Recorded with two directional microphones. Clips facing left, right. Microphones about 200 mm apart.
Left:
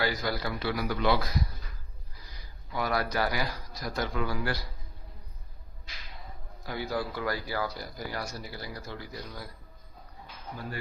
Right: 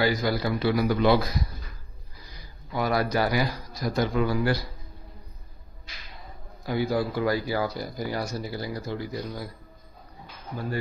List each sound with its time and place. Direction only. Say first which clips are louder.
0.0 s a man's voice: right 6 dB; 15° right (ahead or behind)
2.7 s a man's voice: right 5 dB; 20° right (ahead or behind)
6.6 s a man's voice: right 7 dB; 20° right (ahead or behind)